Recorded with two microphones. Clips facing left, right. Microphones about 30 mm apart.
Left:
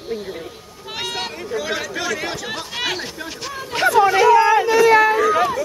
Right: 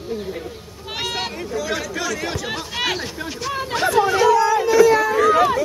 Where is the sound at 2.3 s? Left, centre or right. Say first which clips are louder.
Right 1 dB; centre.